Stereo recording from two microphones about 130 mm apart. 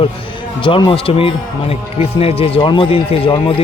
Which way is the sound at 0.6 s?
40° left (ahead or behind).